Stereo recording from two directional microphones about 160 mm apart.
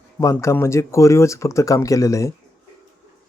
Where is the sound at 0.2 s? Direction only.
20° left (ahead or behind).